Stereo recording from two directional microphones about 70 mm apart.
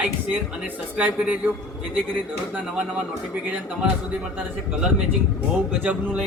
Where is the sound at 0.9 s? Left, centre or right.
Right.